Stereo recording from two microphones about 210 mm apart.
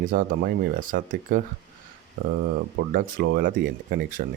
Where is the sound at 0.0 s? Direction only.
40° right (ahead or behind).